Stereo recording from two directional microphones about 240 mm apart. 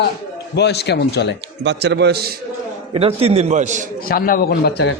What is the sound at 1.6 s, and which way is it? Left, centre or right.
Speech, right.